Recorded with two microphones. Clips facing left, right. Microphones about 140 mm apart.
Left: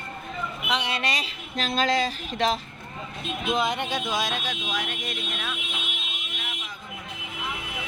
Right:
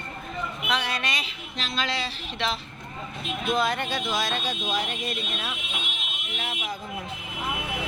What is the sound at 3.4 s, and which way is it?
Speech, 15° left (ahead or behind).